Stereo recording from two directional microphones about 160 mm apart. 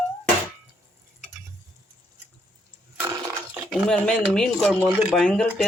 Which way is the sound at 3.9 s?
5° left (ahead or behind).